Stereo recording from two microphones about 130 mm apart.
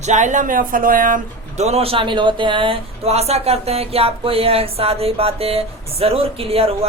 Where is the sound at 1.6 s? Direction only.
50° right (ahead or behind).